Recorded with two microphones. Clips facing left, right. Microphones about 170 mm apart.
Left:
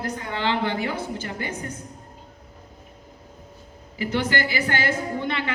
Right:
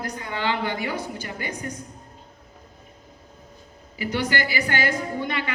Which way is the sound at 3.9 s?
15° right (ahead or behind).